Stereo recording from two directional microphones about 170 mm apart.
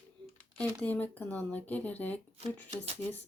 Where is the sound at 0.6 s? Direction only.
10° left (ahead or behind).